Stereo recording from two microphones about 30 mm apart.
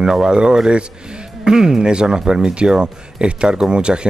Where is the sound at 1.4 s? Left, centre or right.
Right.